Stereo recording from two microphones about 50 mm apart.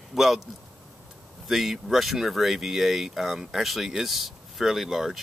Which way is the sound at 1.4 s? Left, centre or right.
Centre.